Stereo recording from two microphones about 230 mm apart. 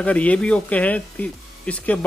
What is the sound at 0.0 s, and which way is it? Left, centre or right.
Speech, centre.